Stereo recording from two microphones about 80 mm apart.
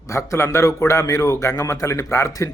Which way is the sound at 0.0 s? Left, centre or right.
Left.